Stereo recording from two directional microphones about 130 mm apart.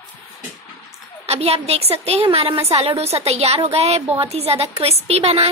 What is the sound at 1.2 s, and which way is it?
A woman's voice, 50° right (ahead or behind).